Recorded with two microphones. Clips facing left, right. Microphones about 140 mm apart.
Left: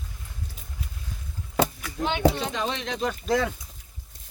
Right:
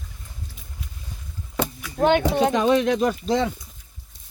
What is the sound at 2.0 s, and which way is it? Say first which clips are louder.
Speech: right 6 dB; 60° right (ahead or behind).